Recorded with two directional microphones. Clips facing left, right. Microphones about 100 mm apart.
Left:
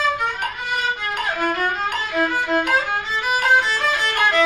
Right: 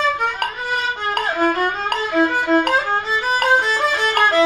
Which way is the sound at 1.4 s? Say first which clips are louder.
Right 3 dB; 35° right (ahead or behind).